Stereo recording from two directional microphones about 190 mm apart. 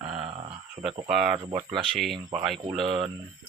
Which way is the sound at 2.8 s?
30° right (ahead or behind).